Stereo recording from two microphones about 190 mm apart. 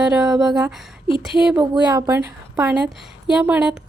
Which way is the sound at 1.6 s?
20° right (ahead or behind).